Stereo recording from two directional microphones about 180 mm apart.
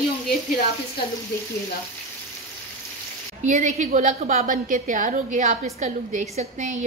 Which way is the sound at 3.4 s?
40° right (ahead or behind).